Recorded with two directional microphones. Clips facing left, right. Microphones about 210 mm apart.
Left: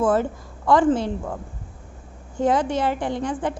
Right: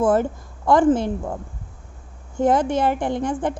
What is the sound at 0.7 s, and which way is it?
Speech, 50° right (ahead or behind).